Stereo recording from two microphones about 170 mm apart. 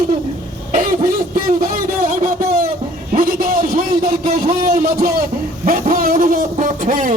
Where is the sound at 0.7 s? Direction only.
55° right (ahead or behind).